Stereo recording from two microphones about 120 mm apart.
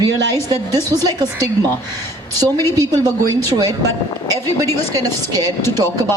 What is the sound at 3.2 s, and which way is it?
A woman's voice, 30° right (ahead or behind).